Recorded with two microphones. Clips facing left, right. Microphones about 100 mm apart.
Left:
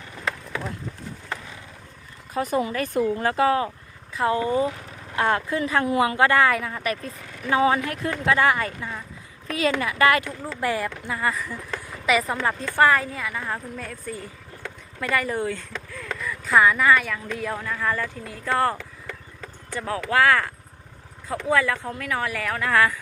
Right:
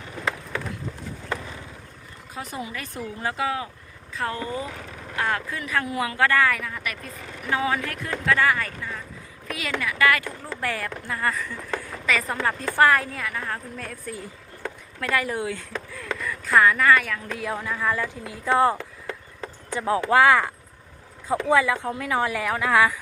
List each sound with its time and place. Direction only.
2.3 s speech: 50° left (ahead or behind)
4.2 s speech: 20° left (ahead or behind)
9.5 s a woman's voice: 35° left (ahead or behind)
10.6 s speech: 15° left (ahead or behind)
11.0 s speech: 5° left (ahead or behind)
15.0 s speech: centre (ahead or behind)